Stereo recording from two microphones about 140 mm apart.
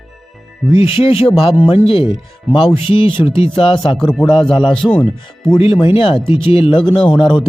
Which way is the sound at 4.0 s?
5° left (ahead or behind).